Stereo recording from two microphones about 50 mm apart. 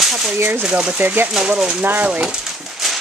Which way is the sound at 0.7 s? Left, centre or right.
Right.